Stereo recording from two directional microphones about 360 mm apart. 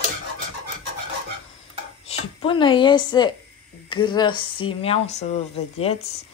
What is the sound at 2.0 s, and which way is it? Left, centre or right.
A woman's voice, centre.